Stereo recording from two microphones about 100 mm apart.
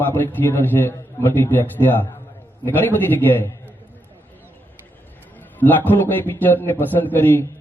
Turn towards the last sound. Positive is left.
turn(degrees=20)  # may be behind; listen again after turning